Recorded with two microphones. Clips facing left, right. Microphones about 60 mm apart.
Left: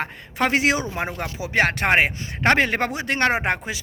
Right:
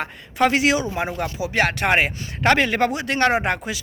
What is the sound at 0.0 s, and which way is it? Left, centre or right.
Speech, left.